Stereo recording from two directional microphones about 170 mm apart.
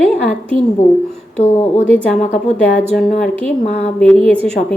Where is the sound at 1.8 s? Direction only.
10° left (ahead or behind).